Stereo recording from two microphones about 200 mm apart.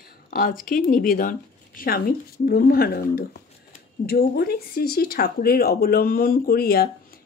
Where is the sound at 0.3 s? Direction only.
45° left (ahead or behind).